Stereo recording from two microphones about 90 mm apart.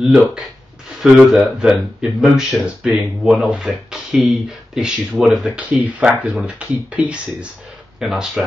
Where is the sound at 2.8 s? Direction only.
5° right (ahead or behind).